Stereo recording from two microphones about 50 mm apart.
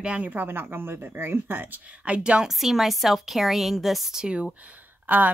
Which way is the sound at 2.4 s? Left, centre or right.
Centre.